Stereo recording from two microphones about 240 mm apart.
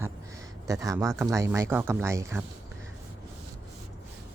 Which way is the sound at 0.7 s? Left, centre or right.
Centre.